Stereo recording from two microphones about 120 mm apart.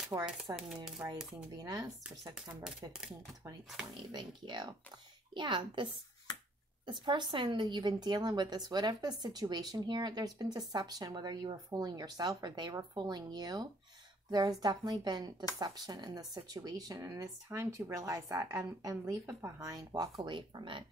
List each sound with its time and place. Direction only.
0.1 s speech: 30° right (ahead or behind)
1.0 s speech: 15° right (ahead or behind)
1.3 s speech: 30° right (ahead or behind)
2.3 s speech: 5° right (ahead or behind)
3.9 s speech: 35° right (ahead or behind)
6.9 s speech: 40° right (ahead or behind)